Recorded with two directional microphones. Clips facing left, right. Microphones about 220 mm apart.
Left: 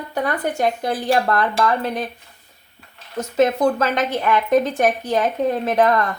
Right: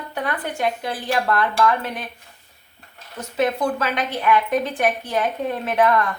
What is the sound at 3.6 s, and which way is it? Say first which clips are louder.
Speech: left 4 dB; 45° left (ahead or behind).